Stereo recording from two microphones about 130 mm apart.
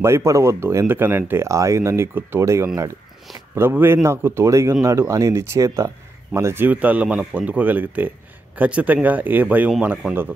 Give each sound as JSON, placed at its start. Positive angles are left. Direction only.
{"t": 0.0, "sound": "a man's voice", "side_deg": -20}